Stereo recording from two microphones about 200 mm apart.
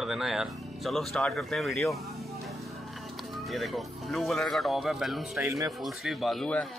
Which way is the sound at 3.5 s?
Centre (ahead or behind).